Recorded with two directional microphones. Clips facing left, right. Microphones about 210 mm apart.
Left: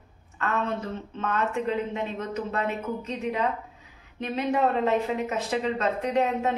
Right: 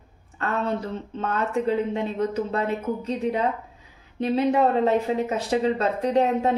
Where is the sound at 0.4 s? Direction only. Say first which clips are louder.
Right 2 dB; 35° right (ahead or behind).